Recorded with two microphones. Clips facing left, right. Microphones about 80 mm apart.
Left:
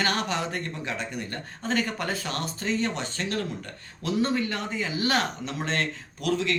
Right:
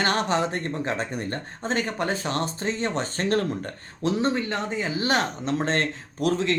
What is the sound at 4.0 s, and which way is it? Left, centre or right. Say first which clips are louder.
Speech: right 2 dB; right.